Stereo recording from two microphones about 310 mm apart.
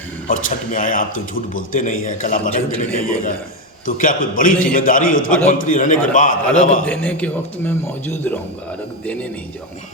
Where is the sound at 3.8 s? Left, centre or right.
Left.